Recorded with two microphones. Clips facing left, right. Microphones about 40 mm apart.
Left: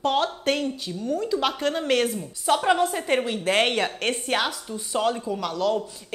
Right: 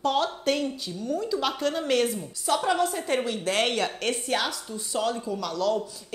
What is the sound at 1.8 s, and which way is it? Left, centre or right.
Speech, centre.